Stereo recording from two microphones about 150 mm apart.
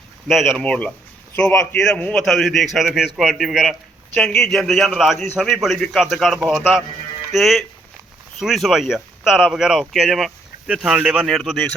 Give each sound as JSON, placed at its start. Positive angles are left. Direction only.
{"t": 0.3, "sound": "speech", "side_deg": 0}